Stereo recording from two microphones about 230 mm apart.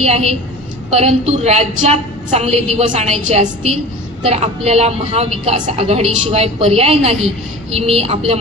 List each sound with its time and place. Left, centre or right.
0.0 s a woman's voice: right